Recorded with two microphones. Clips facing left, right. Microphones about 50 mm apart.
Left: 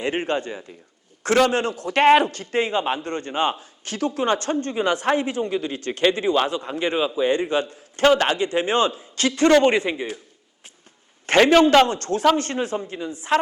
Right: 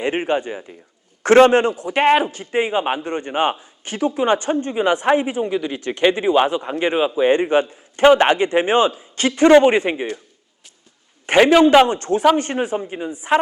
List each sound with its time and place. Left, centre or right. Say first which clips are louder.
0.0 s a man's voice: right 4 dB; right
1.2 s a man's voice: right 7 dB; right
11.3 s a man's voice: right 3 dB; centre